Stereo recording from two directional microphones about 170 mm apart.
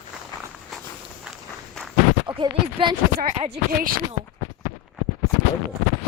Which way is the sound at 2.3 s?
25° right (ahead or behind).